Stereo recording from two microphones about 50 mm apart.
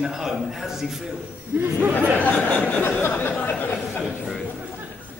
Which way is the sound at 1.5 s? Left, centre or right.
Right.